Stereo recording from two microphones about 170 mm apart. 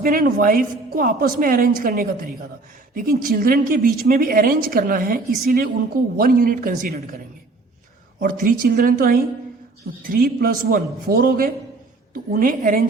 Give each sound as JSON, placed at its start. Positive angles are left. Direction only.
{"t": 0.0, "sound": "speech", "side_deg": -55}
{"t": 8.2, "sound": "a woman's voice", "side_deg": -55}